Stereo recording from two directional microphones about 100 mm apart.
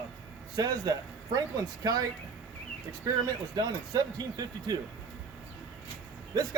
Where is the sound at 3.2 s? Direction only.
45° right (ahead or behind).